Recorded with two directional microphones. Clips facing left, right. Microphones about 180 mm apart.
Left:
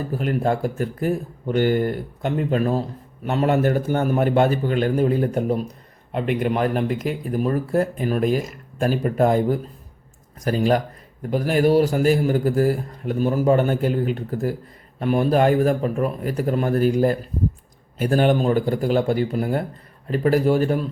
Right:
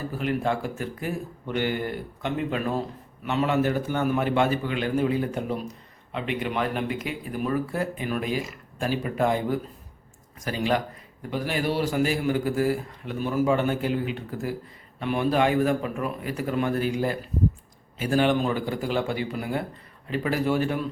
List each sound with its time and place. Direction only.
0.2 s a man's voice: 45° left (ahead or behind)